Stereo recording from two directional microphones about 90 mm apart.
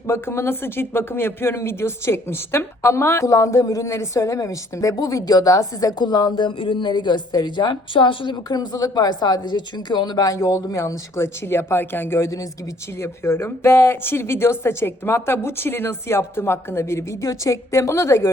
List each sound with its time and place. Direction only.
0.1 s a woman's voice: 30° left (ahead or behind); by 8.4 s 65° left (ahead or behind)
8.4 s a woman's voice: 45° left (ahead or behind)